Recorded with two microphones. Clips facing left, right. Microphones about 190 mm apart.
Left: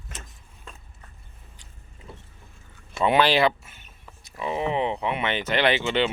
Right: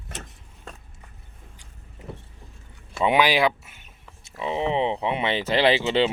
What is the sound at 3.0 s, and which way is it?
Speech, 10° right (ahead or behind).